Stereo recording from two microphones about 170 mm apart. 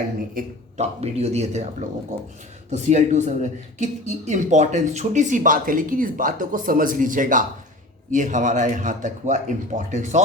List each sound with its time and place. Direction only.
0.8 s speech: 40° right (ahead or behind)
2.6 s a man's voice: 45° right (ahead or behind)